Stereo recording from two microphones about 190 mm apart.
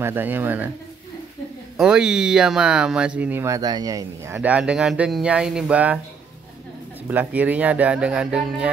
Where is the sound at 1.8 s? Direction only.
5° right (ahead or behind).